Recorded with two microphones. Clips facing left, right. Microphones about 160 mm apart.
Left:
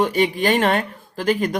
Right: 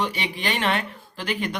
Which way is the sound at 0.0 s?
45° left (ahead or behind).